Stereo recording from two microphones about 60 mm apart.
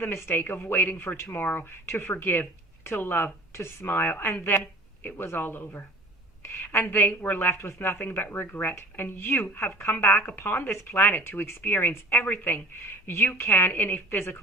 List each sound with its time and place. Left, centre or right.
0.0 s speech: left
3.8 s speech: left
6.4 s a sound: left
6.9 s speech: left
10.1 s speech: left
10.4 s speech: left